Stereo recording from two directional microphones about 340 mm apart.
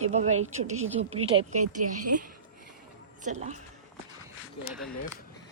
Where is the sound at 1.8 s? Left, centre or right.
Right.